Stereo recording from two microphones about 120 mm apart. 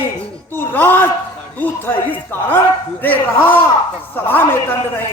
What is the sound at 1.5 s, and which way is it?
A man's voice, 15° left (ahead or behind).